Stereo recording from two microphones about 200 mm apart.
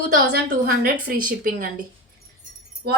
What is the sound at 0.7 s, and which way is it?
A woman's voice, 45° right (ahead or behind).